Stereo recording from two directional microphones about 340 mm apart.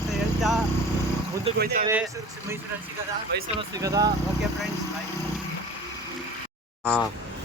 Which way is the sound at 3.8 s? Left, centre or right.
Centre.